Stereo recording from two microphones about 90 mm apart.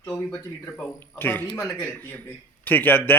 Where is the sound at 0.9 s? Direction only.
20° left (ahead or behind).